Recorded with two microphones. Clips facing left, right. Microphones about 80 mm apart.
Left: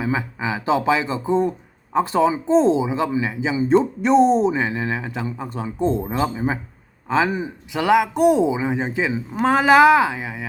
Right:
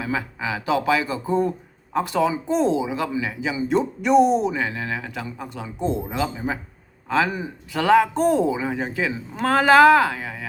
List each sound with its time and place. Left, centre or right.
0.0 s speech: left
7.1 s speech: left